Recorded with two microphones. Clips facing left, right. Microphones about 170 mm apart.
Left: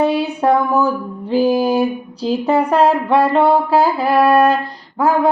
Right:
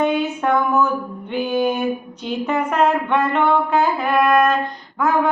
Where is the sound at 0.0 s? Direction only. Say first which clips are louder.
Left 3 dB; 35° left (ahead or behind).